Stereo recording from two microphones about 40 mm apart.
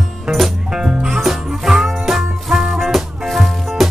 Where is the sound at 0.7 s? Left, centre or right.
Centre.